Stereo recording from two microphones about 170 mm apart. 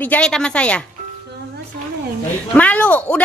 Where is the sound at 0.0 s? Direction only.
5° left (ahead or behind).